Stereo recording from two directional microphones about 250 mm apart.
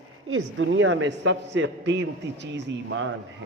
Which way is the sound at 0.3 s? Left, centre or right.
Right.